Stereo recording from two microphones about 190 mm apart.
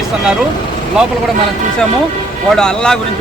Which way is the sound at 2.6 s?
5° left (ahead or behind).